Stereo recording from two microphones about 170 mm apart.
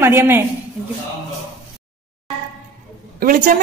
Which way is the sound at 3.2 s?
55° right (ahead or behind).